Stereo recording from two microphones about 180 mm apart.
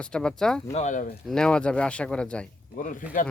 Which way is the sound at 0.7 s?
40° left (ahead or behind).